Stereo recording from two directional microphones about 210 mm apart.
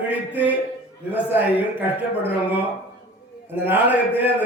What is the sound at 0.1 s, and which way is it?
A man's voice, 10° right (ahead or behind).